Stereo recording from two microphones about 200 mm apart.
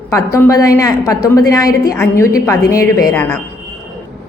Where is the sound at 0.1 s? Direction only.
15° left (ahead or behind).